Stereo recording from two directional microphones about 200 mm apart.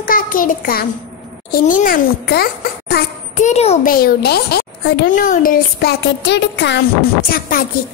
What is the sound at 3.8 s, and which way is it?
A child's voice, 50° left (ahead or behind).